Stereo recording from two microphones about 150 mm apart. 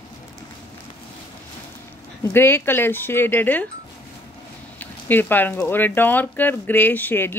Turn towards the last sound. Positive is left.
turn(degrees=15)  # may be behind; listen again after turning